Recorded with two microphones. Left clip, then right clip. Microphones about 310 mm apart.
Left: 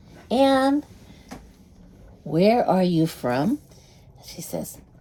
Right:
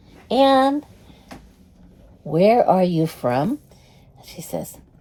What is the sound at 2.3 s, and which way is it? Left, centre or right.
Speech, centre.